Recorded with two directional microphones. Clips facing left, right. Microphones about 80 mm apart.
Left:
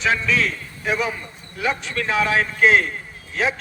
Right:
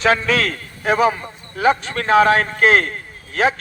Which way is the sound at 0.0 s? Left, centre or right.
Right.